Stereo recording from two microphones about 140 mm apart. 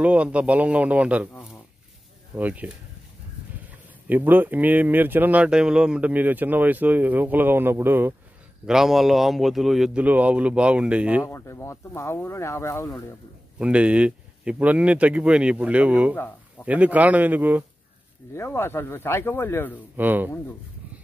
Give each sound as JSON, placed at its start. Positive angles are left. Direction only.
{"t": 0.0, "sound": "speech", "side_deg": -10}
{"t": 2.3, "sound": "speech", "side_deg": -10}
{"t": 4.1, "sound": "speech", "side_deg": -15}
{"t": 8.6, "sound": "speech", "side_deg": -5}
{"t": 11.2, "sound": "speech", "side_deg": 20}
{"t": 13.6, "sound": "speech", "side_deg": -10}
{"t": 18.3, "sound": "speech", "side_deg": 15}
{"t": 20.0, "sound": "speech", "side_deg": -15}